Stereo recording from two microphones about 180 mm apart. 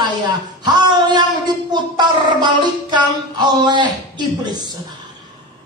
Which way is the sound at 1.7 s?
25° right (ahead or behind).